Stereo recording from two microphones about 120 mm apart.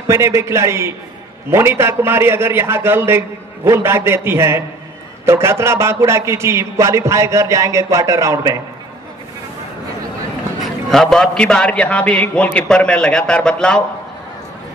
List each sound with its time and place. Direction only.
0.1 s a man's voice: 25° right (ahead or behind)
10.9 s a man's voice: 5° left (ahead or behind)